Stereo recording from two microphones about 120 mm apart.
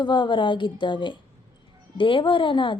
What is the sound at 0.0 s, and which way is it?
Speech, 40° left (ahead or behind).